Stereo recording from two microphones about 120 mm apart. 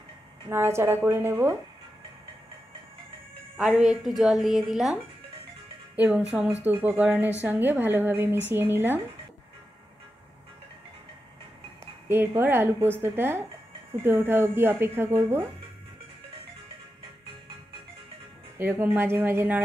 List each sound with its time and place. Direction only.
0.5 s speech: 20° right (ahead or behind)
3.5 s a woman's voice: 5° right (ahead or behind)
5.9 s speech: 15° right (ahead or behind)
12.1 s speech: 20° right (ahead or behind)
18.6 s speech: 15° right (ahead or behind)